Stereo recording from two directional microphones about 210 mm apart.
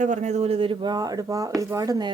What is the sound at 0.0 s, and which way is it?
Speech, 35° right (ahead or behind).